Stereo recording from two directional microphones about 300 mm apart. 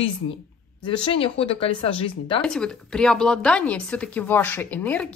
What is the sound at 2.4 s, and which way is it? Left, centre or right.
Speech, centre.